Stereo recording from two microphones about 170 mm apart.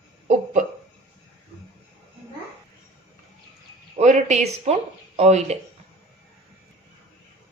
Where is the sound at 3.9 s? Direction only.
40° right (ahead or behind).